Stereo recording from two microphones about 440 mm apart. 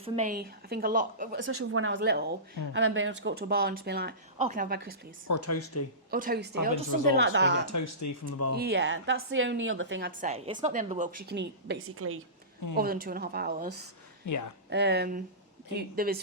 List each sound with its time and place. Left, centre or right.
0.0 s a woman's voice: centre
5.3 s speech: left
6.1 s a woman's voice: centre
7.7 s speech: left
8.5 s a woman's voice: right
14.3 s speech: left
14.7 s a woman's voice: right